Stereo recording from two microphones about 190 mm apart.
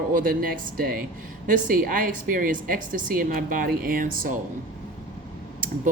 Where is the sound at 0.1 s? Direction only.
45° right (ahead or behind).